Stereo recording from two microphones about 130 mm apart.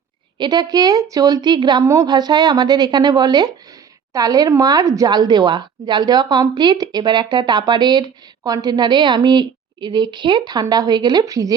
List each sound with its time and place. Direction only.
0.3 s speech: 35° right (ahead or behind)